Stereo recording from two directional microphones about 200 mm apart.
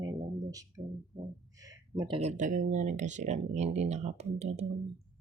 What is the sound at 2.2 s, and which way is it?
Speech, 35° right (ahead or behind).